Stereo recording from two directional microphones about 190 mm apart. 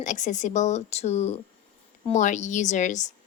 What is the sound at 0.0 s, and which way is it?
Speech, 40° left (ahead or behind).